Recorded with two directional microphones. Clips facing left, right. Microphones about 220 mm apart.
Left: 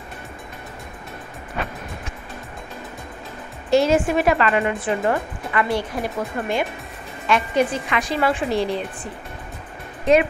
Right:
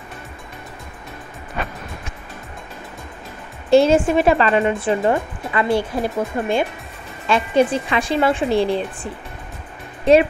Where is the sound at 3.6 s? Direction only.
30° right (ahead or behind).